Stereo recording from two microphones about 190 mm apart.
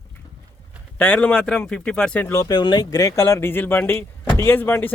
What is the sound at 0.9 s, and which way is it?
Speech, 10° left (ahead or behind).